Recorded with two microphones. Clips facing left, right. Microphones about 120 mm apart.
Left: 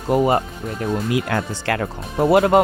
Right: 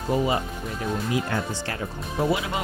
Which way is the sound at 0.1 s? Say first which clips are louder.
Left 7 dB; 50° left (ahead or behind).